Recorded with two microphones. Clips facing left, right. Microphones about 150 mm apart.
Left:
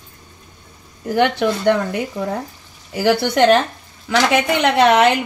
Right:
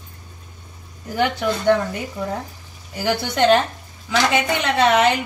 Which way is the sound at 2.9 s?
80° left.